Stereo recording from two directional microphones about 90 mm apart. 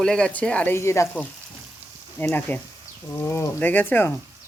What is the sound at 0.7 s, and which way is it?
Speech, 30° left (ahead or behind).